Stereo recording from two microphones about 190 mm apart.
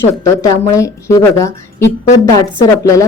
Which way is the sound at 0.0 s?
15° left (ahead or behind).